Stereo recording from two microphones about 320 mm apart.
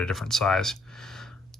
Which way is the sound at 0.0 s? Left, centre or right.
Centre.